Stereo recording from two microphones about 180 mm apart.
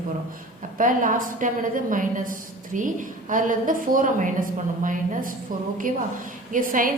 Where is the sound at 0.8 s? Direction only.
50° right (ahead or behind).